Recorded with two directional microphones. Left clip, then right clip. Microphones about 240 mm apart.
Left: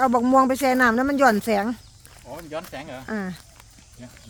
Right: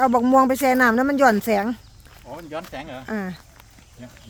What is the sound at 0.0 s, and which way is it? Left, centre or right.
Speech, centre.